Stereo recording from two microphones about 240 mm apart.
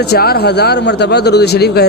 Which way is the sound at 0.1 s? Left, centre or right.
Left.